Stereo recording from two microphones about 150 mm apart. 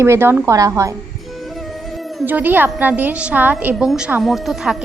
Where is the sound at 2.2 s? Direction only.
10° right (ahead or behind).